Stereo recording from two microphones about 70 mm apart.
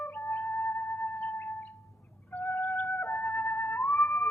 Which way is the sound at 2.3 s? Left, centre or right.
Left.